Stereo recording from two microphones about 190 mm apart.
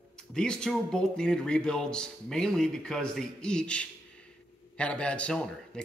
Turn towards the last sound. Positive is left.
turn(degrees=5)  # may be behind; listen again after turning